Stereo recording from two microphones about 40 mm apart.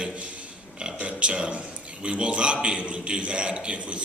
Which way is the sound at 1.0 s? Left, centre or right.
Right.